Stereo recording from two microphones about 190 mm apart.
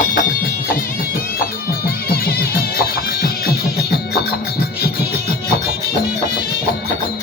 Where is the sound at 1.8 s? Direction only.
55° left (ahead or behind).